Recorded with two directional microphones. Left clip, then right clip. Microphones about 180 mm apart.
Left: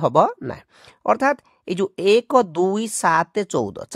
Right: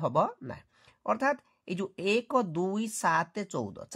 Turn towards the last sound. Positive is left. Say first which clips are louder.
# left 13 dB
turn(degrees=45)  # may be behind; listen again after turning